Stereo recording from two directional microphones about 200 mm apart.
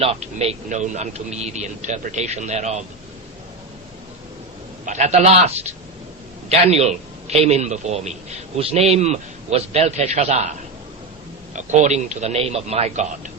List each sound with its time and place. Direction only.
0.0 s a man's voice: 30° right (ahead or behind)
4.9 s a man's voice: 35° right (ahead or behind)
11.5 s a man's voice: 35° right (ahead or behind)